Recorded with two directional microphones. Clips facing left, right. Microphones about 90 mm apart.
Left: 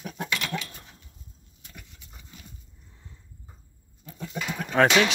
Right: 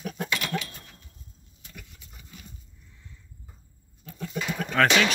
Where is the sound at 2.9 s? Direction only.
35° left (ahead or behind).